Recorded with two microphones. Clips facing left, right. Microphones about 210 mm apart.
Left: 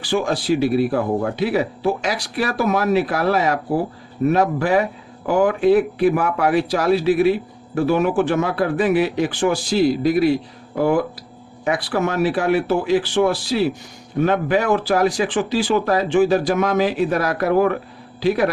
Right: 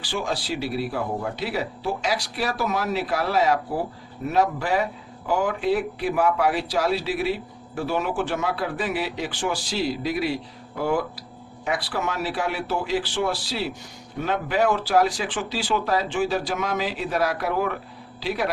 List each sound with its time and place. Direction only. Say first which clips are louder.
0.1 s speech: left 9 dB; 55° left (ahead or behind)